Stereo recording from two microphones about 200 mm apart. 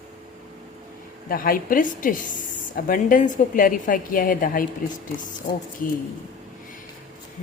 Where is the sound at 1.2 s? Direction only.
45° left (ahead or behind).